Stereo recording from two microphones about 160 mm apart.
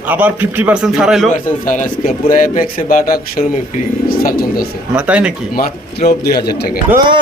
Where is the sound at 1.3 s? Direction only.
55° left (ahead or behind).